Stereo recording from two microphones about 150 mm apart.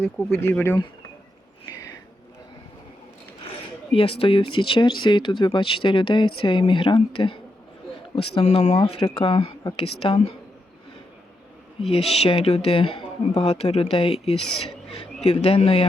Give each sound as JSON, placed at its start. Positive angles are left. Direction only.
{"t": 0.0, "sound": "speech", "side_deg": 15}
{"t": 3.9, "sound": "speech", "side_deg": 35}
{"t": 8.4, "sound": "speech", "side_deg": 45}
{"t": 11.9, "sound": "speech", "side_deg": 40}
{"t": 14.3, "sound": "speech", "side_deg": 0}
{"t": 14.8, "sound": "a man's voice", "side_deg": 45}